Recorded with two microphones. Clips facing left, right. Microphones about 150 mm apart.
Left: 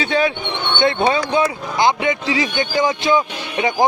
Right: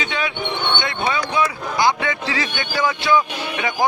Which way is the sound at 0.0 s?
35° left (ahead or behind).